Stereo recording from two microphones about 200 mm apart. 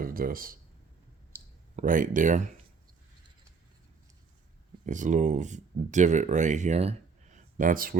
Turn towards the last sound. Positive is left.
turn(degrees=-45)  # may be behind; listen again after turning